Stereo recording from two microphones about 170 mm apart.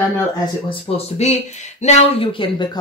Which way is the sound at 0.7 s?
35° left (ahead or behind).